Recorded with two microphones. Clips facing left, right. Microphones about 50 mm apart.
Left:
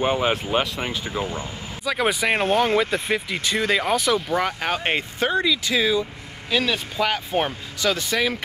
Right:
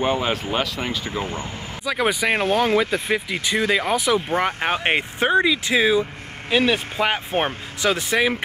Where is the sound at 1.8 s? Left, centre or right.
Centre.